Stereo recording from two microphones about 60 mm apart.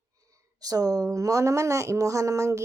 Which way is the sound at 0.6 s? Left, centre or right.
Right.